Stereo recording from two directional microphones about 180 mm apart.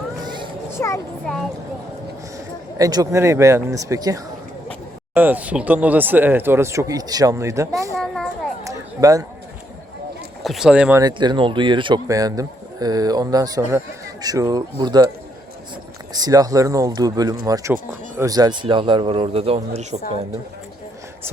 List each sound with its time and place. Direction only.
0.8 s a child's voice: 15° left (ahead or behind)
2.7 s speech: 20° right (ahead or behind)
7.9 s a sound: centre (ahead or behind)
8.6 s a sound: 20° right (ahead or behind)
10.4 s speech: centre (ahead or behind)
11.0 s speech: 25° right (ahead or behind)
16.1 s speech: 20° right (ahead or behind); by 20.0 s 40° right (ahead or behind)